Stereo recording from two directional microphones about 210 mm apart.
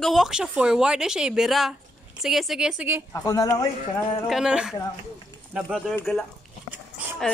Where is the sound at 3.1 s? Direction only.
15° left (ahead or behind).